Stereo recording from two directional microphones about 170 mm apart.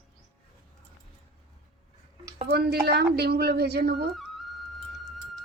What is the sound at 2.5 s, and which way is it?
Speech, 70° right (ahead or behind).